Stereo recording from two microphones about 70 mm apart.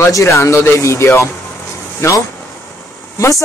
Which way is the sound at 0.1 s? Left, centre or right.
Left.